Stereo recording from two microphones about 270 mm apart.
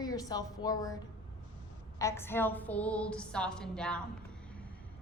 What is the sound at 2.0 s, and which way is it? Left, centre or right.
A woman's voice, centre.